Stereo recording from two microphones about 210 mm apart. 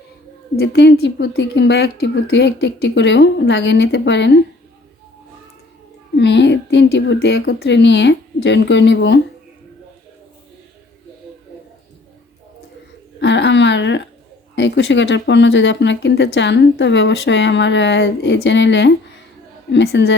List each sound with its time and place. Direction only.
0.5 s speech: 50° left (ahead or behind)
6.1 s speech: 55° left (ahead or behind)
13.1 s a sound: 60° left (ahead or behind)
14.5 s speech: 55° left (ahead or behind)